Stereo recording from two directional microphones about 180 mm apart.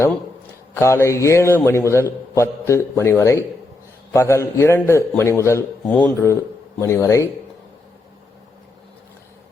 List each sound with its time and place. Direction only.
0.7 s a man's voice: 15° left (ahead or behind)